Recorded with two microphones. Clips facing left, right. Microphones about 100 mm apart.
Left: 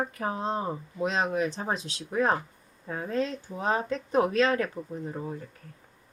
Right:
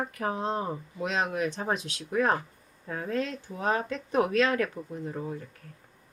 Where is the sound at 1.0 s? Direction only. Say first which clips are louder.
Left 2 dB; 30° left (ahead or behind).